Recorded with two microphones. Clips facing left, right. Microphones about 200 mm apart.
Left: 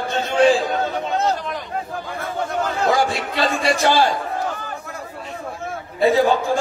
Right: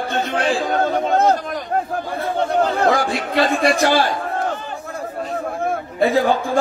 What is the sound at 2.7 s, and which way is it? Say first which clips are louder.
Speech: right 1 dB; 55° right (ahead or behind).